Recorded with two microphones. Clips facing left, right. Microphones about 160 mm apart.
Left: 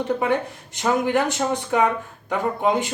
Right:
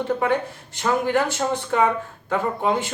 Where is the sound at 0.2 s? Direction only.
20° left (ahead or behind).